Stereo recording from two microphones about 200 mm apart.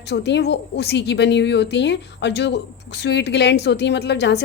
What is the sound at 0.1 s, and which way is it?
A woman's voice, 60° left (ahead or behind).